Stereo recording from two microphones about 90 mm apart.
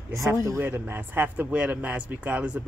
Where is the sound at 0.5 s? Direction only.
20° right (ahead or behind).